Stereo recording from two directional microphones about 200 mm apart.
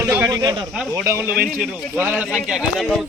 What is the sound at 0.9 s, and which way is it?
Speech, 15° right (ahead or behind).